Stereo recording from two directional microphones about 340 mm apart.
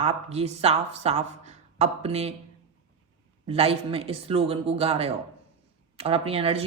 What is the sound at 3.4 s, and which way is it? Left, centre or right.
Speech, centre.